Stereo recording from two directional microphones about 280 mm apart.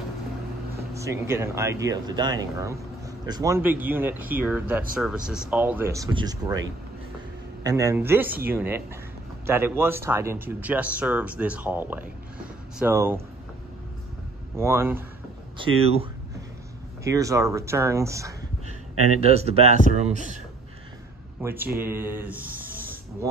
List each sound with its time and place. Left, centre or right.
0.9 s speech: centre
7.6 s speech: centre
14.6 s speech: centre
15.5 s speech: centre
18.9 s speech: right
19.2 s speech: right
21.4 s speech: centre